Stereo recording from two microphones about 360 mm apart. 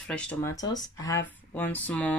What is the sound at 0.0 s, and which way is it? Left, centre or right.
Speech, centre.